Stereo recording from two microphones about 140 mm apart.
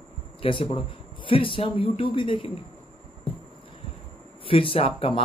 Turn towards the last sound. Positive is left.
turn(degrees=40)  # may be behind; listen again after turning